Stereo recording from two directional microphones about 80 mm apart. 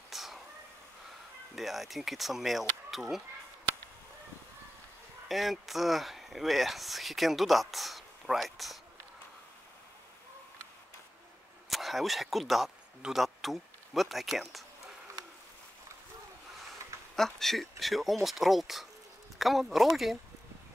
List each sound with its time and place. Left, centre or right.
0.1 s vehicle: centre
1.5 s speech: centre
5.3 s speech: centre
11.7 s a man's voice: centre
17.1 s speech: centre